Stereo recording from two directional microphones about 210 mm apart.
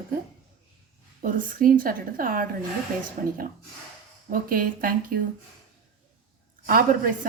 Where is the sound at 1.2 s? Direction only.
40° right (ahead or behind).